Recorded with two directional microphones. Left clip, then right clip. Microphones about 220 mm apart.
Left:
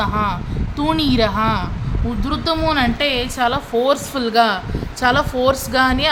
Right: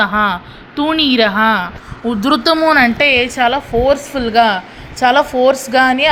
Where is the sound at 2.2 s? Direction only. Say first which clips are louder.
Right 8 dB; 35° right (ahead or behind).